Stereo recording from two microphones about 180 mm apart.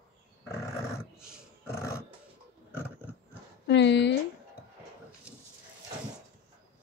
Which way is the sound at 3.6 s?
75° left (ahead or behind).